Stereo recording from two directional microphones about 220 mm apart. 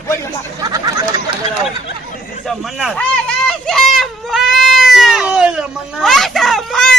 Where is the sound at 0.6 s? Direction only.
15° right (ahead or behind).